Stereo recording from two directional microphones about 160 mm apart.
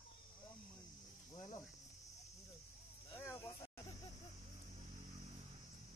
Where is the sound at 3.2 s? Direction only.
15° left (ahead or behind).